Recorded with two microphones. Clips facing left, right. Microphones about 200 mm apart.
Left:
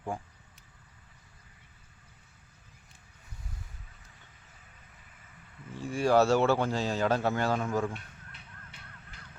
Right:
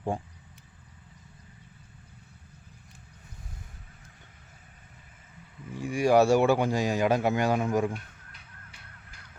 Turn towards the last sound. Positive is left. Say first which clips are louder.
# right 4 dB
turn(degrees=-15)  # may be behind; listen again after turning